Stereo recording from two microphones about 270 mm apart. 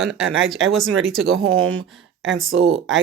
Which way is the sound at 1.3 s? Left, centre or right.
Right.